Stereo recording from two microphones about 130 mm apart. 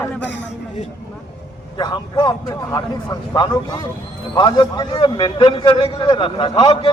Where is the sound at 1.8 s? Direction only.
35° left (ahead or behind).